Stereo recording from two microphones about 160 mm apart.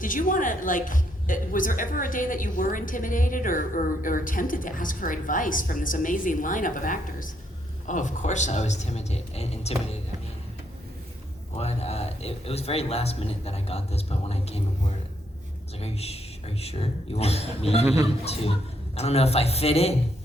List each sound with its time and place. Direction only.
0.0 s a woman's voice: 55° left (ahead or behind); by 9.7 s 40° left (ahead or behind)
11.5 s a man's voice: 40° left (ahead or behind)
18.9 s a man's voice: 40° left (ahead or behind)